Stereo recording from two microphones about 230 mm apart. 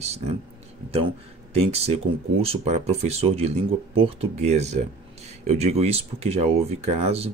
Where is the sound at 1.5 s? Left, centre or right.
Right.